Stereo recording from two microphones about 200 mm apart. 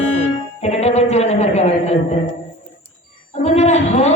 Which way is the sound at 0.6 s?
30° left (ahead or behind).